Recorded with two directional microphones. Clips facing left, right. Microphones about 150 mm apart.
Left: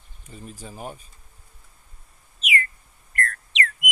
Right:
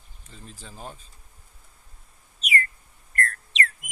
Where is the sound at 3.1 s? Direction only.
35° right (ahead or behind).